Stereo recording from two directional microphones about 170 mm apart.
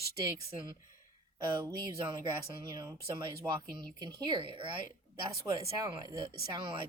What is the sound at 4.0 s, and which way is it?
Speech, 25° right (ahead or behind).